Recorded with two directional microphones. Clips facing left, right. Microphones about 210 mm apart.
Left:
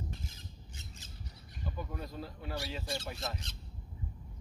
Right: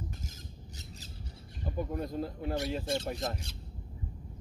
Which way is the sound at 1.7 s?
45° right (ahead or behind).